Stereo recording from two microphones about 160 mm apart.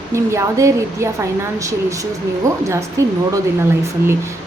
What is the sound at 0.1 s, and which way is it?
A woman's voice, 20° right (ahead or behind).